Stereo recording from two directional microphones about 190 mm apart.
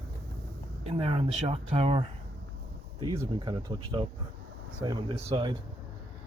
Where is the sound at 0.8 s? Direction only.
30° right (ahead or behind).